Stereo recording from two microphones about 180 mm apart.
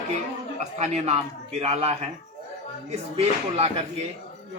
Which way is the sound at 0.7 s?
40° right (ahead or behind).